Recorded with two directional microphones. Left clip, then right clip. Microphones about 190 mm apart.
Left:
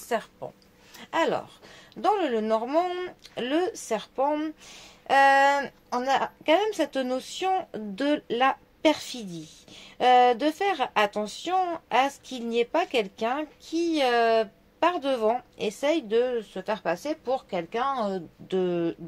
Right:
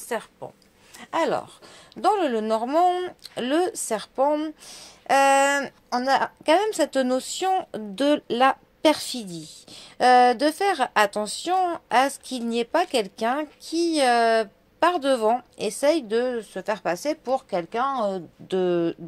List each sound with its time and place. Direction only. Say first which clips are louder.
0.1 s speech: left 1 dB; 35° right (ahead or behind)
18.5 s speech: right 4 dB; 40° right (ahead or behind)